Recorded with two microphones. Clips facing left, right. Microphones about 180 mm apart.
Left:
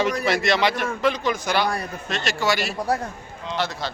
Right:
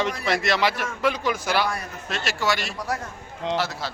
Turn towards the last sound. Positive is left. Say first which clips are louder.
# even
turn(degrees=-5)  # may be behind; listen again after turning